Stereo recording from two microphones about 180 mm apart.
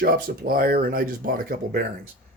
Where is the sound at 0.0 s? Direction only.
55° right (ahead or behind).